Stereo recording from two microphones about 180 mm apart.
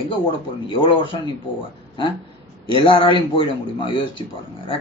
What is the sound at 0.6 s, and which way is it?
Speech, 30° left (ahead or behind).